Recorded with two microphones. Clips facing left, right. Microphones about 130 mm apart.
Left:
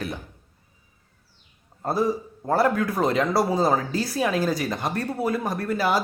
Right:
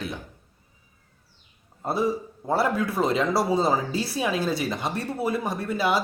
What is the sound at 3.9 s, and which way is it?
Speech, 25° right (ahead or behind).